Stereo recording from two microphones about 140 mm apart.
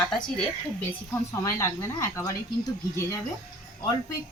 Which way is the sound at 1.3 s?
20° left (ahead or behind).